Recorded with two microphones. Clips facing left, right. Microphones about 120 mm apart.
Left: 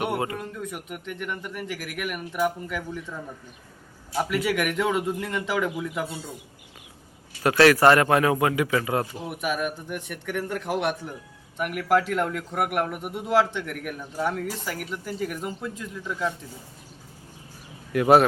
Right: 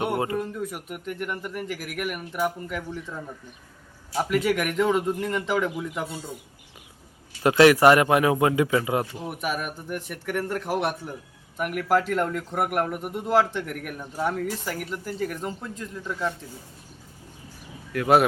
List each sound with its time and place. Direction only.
0.3 s a man's voice: 5° right (ahead or behind)
4.1 s a man's voice: centre (ahead or behind)
7.4 s a man's voice: 20° right (ahead or behind)
9.2 s a man's voice: centre (ahead or behind)
17.9 s speech: 10° left (ahead or behind)